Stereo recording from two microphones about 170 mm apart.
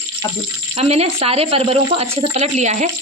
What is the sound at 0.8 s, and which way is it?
Speech, 35° right (ahead or behind).